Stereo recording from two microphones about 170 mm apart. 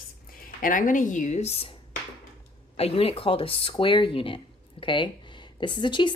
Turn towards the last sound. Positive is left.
turn(degrees=25)  # may be behind; listen again after turning